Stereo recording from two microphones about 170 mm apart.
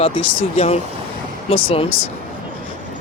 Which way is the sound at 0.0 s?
30° left (ahead or behind).